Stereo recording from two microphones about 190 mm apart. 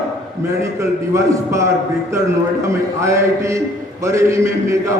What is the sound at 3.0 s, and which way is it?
A man's voice, 15° right (ahead or behind).